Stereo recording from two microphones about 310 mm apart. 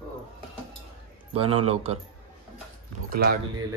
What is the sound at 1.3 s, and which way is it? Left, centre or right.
Speech, centre.